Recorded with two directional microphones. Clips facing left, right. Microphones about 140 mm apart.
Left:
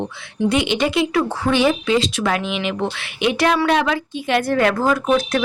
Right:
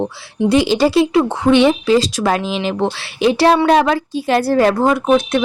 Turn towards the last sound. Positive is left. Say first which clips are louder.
# right 4 dB
turn(degrees=-20)  # may be behind; listen again after turning